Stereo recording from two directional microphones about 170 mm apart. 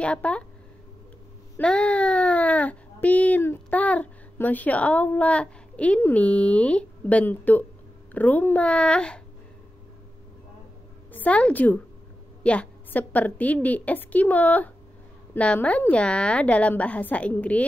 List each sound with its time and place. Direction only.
0.0 s a woman's voice: 5° left (ahead or behind)
1.6 s a woman's voice: 5° left (ahead or behind)
11.1 s a woman's voice: 10° left (ahead or behind)